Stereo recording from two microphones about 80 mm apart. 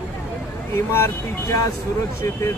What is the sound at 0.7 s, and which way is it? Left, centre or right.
Speech, left.